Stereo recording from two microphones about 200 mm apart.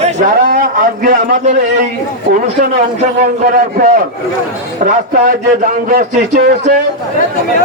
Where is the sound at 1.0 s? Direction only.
40° right (ahead or behind).